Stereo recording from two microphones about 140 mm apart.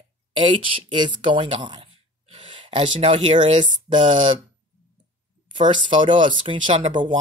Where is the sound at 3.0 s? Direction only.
40° right (ahead or behind).